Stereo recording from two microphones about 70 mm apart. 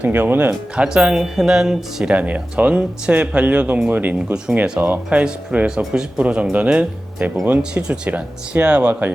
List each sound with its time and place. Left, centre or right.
0.0 s speech: right
0.8 s speech: centre
2.1 s speech: right
4.5 s speech: centre